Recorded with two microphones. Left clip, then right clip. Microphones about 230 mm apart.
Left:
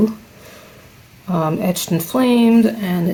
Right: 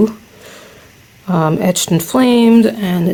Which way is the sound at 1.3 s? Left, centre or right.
Right.